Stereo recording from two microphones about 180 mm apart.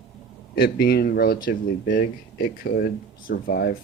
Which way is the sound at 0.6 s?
60° left (ahead or behind).